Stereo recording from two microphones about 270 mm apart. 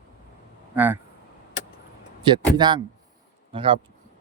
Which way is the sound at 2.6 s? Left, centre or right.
Centre.